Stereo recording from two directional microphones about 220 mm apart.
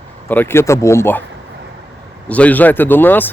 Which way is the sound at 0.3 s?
10° left (ahead or behind).